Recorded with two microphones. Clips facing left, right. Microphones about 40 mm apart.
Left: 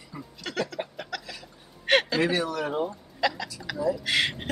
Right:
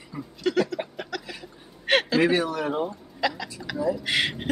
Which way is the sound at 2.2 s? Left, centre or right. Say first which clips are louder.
Right 4 dB; right.